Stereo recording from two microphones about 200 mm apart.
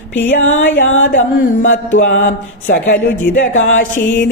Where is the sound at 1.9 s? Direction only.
40° left (ahead or behind).